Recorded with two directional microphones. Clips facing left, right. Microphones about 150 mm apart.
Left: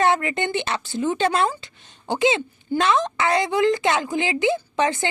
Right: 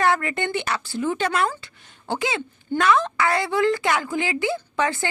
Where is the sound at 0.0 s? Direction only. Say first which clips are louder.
Left 1 dB; 20° left (ahead or behind).